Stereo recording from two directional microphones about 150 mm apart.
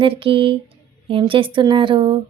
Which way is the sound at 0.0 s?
35° right (ahead or behind).